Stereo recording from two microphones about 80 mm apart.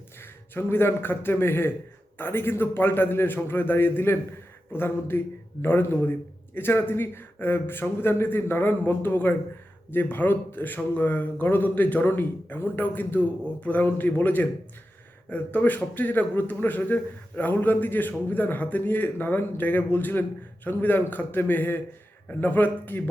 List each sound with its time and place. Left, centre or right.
0.2 s a man's voice: left